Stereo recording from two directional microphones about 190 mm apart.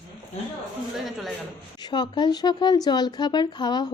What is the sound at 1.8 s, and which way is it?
A woman's voice, 20° left (ahead or behind).